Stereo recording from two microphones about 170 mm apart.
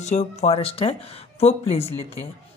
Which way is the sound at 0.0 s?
40° left (ahead or behind).